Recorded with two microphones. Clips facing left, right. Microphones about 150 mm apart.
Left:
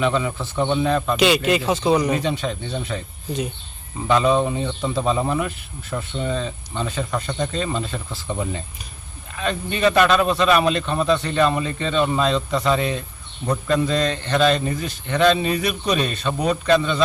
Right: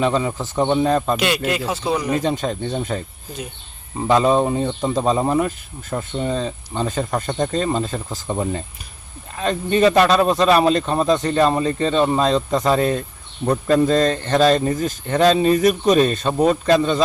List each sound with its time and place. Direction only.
0.0 s speech: 35° right (ahead or behind)
1.1 s speech: centre (ahead or behind)
2.1 s speech: 40° right (ahead or behind)
4.0 s speech: 35° right (ahead or behind)